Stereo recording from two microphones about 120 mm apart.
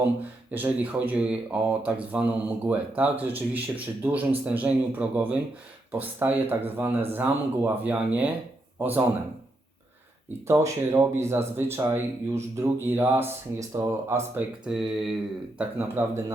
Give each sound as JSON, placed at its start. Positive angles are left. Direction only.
{"t": 0.5, "sound": "speech", "side_deg": -15}
{"t": 10.4, "sound": "speech", "side_deg": -25}
{"t": 14.3, "sound": "speech", "side_deg": -5}
{"t": 15.8, "sound": "speech", "side_deg": -20}